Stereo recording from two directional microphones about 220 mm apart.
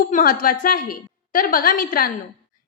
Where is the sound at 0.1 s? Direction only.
35° left (ahead or behind).